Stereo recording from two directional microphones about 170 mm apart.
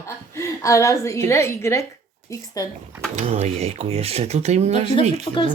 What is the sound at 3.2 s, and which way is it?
Speech, 40° right (ahead or behind).